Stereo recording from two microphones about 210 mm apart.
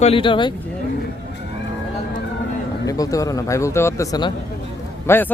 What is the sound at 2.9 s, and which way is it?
Speech, 15° left (ahead or behind).